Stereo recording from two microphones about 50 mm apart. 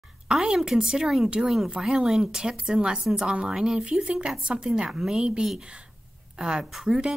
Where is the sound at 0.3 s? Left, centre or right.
Centre.